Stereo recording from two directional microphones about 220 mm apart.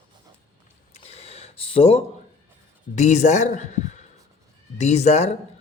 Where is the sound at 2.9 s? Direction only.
30° left (ahead or behind).